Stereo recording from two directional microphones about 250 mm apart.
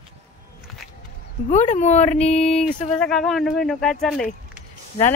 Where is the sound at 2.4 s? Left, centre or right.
Centre.